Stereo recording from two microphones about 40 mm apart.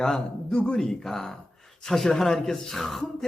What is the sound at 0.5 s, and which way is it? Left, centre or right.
A man's voice, centre.